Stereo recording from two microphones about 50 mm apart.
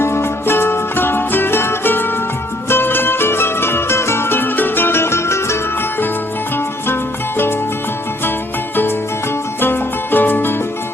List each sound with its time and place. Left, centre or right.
0.0 s music: left
6.8 s music: left
9.6 s music: left